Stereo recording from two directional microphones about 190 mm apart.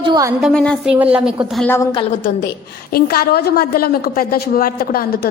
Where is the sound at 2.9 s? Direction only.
50° left (ahead or behind).